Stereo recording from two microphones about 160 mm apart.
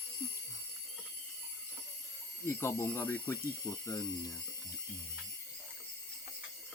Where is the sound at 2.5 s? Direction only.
15° left (ahead or behind).